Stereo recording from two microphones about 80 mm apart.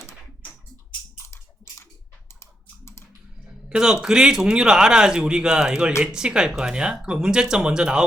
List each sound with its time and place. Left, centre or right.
2.4 s typing: left
3.7 s a man's voice: centre